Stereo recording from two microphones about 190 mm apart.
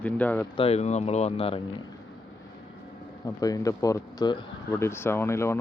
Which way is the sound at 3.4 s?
20° left (ahead or behind).